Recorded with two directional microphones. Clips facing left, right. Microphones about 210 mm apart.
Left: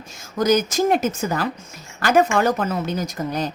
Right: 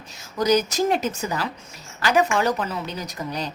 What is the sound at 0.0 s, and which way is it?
Speech, 50° left (ahead or behind).